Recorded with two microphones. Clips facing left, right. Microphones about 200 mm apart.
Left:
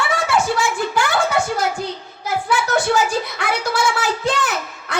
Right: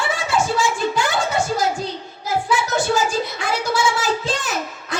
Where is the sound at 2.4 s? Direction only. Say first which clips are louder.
Left 2 dB; 65° left (ahead or behind).